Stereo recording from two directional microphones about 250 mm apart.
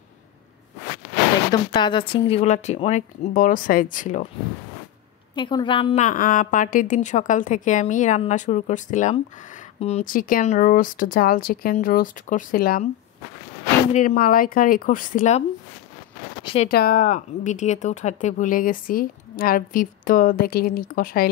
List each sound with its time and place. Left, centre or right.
1.5 s a woman's voice: centre
5.3 s a woman's voice: centre; by 12.8 s left
13.9 s speech: left
16.6 s speech: left